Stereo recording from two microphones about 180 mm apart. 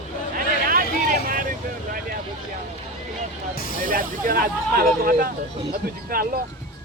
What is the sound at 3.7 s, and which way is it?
Speech, 50° right (ahead or behind).